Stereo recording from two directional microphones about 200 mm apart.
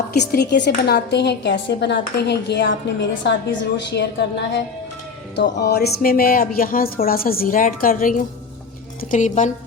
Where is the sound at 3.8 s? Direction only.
60° left (ahead or behind).